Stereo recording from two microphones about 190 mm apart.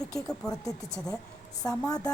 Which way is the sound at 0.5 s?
20° left (ahead or behind).